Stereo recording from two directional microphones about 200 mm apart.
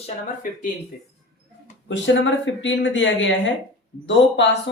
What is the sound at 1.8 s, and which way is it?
Speech, 65° left (ahead or behind).